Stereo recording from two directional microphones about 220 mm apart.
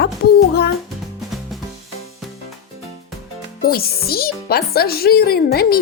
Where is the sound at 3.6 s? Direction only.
45° left (ahead or behind).